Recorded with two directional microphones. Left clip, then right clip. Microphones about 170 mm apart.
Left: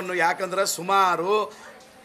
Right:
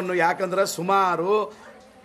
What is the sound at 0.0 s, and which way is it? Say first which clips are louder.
A man's voice: right 1 dB; 5° right (ahead or behind).